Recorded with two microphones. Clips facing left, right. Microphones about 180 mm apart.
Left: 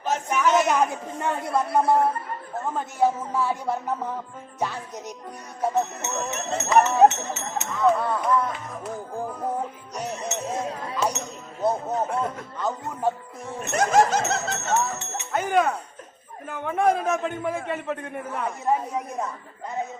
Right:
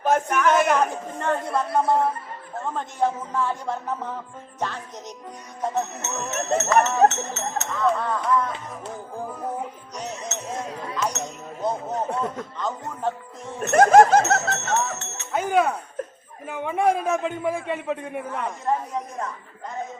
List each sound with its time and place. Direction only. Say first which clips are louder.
0.1 s a man's voice: right 6 dB; 55° right (ahead or behind)
0.4 s a sound: even; 55° right (ahead or behind)
0.7 s a man's voice: right 1 dB; 10° left (ahead or behind)
9.9 s music: left 4 dB; 10° left (ahead or behind)
11.6 s a sound: left 2 dB; 10° left (ahead or behind)
12.5 s a man's voice: left 1 dB; 10° left (ahead or behind)
13.6 s speech: right 6 dB; 50° right (ahead or behind)
14.5 s speech: even; 10° left (ahead or behind)
15.3 s a man's voice: right 1 dB; 5° right (ahead or behind)
18.3 s a man's voice: left 2 dB; 10° left (ahead or behind)